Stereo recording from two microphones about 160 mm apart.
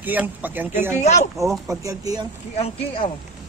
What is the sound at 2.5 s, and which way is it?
Speech, 35° left (ahead or behind).